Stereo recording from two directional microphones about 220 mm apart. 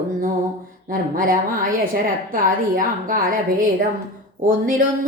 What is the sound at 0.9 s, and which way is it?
A woman's voice, 40° right (ahead or behind).